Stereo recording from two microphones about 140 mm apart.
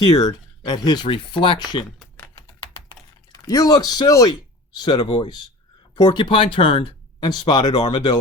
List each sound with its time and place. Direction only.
0.0 s speech: 30° left (ahead or behind)
2.1 s typing: 20° left (ahead or behind)
3.3 s speech: 25° left (ahead or behind)